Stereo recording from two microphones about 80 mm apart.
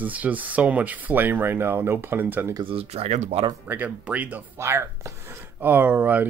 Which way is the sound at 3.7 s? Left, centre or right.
Centre.